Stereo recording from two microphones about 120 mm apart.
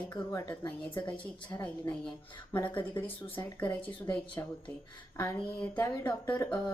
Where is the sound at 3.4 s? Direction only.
15° left (ahead or behind).